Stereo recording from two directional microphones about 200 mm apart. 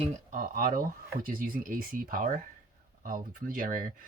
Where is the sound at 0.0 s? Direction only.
40° right (ahead or behind).